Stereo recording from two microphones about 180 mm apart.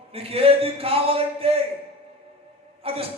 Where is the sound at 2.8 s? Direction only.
30° right (ahead or behind).